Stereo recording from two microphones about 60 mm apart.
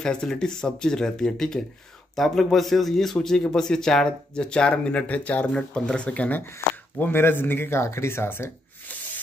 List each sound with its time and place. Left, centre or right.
0.0 s a man's voice: centre
7.0 s speech: left